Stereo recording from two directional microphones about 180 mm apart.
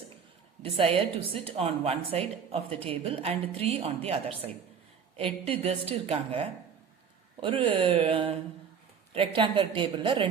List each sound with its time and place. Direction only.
0.6 s a woman's voice: 30° right (ahead or behind)
5.1 s a woman's voice: 30° right (ahead or behind)